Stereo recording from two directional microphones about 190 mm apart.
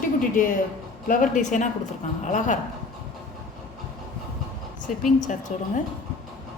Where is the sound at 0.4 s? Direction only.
45° left (ahead or behind).